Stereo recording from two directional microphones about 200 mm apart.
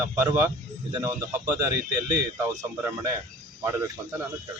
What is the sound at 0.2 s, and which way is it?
Speech, 10° right (ahead or behind).